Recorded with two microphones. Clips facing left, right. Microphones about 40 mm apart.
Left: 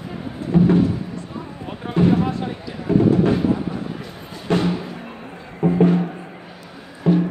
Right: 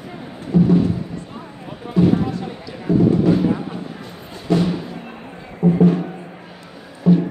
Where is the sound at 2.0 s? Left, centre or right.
Left.